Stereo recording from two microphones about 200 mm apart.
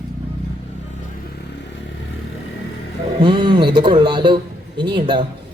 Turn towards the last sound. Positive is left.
turn(degrees=-25)  # may be behind; listen again after turning